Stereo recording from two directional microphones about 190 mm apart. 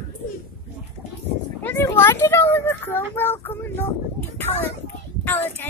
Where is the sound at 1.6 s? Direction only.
10° left (ahead or behind).